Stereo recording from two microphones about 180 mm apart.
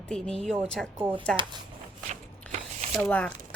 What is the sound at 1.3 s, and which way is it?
Speech, 25° right (ahead or behind).